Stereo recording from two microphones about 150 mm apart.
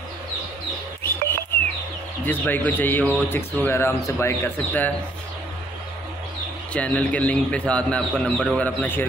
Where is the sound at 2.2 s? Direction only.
10° left (ahead or behind).